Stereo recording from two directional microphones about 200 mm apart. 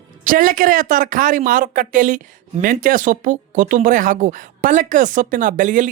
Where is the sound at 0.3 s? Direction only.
45° right (ahead or behind).